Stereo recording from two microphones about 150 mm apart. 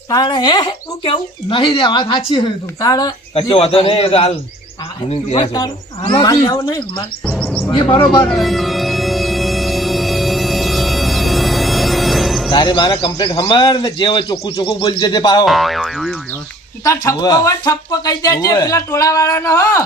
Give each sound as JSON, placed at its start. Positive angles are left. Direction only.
{"t": 0.1, "sound": "speech", "side_deg": 30}
{"t": 3.3, "sound": "speech", "side_deg": 40}
{"t": 5.4, "sound": "speech", "side_deg": 25}
{"t": 7.3, "sound": "a sound", "side_deg": 10}
{"t": 7.7, "sound": "speech", "side_deg": 35}
{"t": 8.2, "sound": "music", "side_deg": 0}
{"t": 12.5, "sound": "speech", "side_deg": 30}
{"t": 15.4, "sound": "speech", "side_deg": 0}
{"t": 16.8, "sound": "speech", "side_deg": 20}